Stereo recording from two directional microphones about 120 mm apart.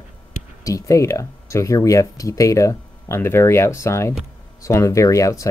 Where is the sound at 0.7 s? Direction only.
25° left (ahead or behind).